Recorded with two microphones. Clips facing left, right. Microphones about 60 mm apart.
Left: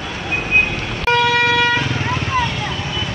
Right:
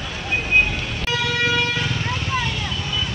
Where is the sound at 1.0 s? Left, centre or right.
Left.